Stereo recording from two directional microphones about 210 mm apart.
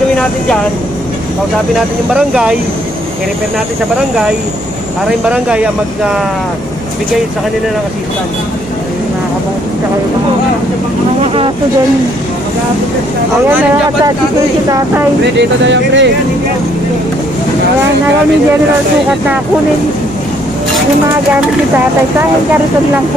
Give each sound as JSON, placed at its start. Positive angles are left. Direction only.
{"t": 2.1, "sound": "speech", "side_deg": -5}
{"t": 5.2, "sound": "speech", "side_deg": -5}
{"t": 15.3, "sound": "speech", "side_deg": -60}